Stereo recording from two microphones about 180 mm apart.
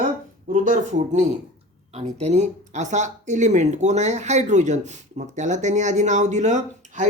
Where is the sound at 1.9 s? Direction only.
35° right (ahead or behind).